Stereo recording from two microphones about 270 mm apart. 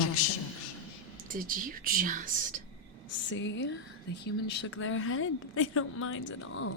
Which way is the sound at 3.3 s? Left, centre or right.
Left.